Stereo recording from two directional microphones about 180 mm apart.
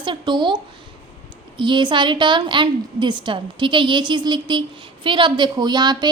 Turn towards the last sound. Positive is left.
turn(degrees=-25)  # may be behind; listen again after turning